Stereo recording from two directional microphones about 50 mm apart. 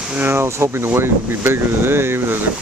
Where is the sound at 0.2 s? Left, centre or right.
Right.